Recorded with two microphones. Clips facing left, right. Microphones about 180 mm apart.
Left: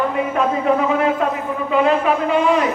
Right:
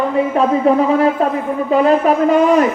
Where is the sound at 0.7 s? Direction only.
35° right (ahead or behind).